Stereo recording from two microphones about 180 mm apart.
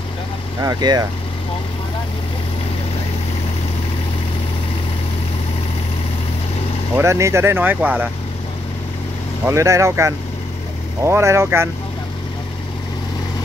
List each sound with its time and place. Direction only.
0.6 s speech: 20° right (ahead or behind)
7.0 s speech: 15° right (ahead or behind)
9.5 s speech: 15° right (ahead or behind)